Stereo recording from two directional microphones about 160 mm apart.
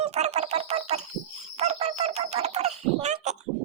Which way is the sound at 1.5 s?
45° right (ahead or behind).